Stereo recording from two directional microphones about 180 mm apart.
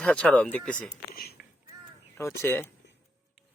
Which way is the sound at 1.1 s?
55° left (ahead or behind).